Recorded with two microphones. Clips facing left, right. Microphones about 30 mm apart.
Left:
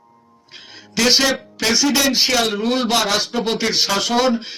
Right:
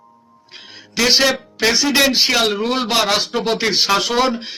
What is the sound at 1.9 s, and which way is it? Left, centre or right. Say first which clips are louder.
Speech: right 3 dB; right.